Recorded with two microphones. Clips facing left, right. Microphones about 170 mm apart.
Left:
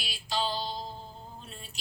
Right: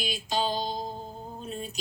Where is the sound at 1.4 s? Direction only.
20° right (ahead or behind).